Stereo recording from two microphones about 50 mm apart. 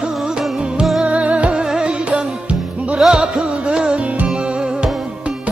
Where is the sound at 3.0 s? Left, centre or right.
Centre.